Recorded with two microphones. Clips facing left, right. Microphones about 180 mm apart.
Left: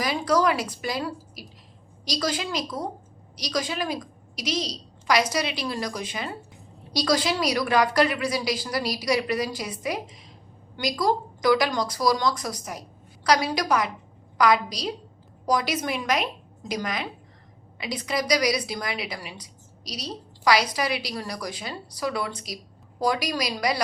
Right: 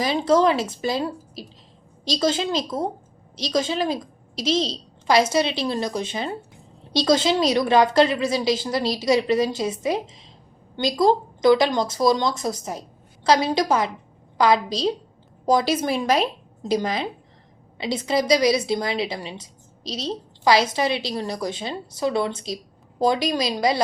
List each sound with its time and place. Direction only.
0.0 s a woman's voice: 25° right (ahead or behind)